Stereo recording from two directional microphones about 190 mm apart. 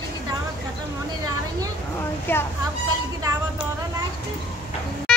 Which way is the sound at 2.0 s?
15° left (ahead or behind).